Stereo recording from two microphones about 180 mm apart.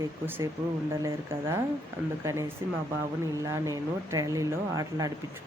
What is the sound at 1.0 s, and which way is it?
Speech, 15° right (ahead or behind).